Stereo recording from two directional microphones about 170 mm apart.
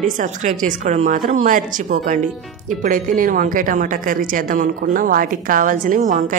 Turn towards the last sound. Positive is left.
turn(degrees=-50)  # may be behind; listen again after turning